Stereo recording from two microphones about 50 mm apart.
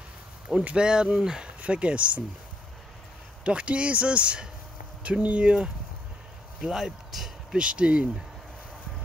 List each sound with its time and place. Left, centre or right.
0.7 s speech: centre
3.4 s speech: right
6.6 s speech: centre
7.5 s speech: right